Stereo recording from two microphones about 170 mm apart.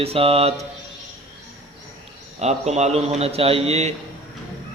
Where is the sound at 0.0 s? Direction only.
35° right (ahead or behind).